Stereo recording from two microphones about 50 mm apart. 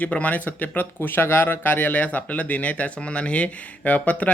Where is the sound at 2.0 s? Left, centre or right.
Left.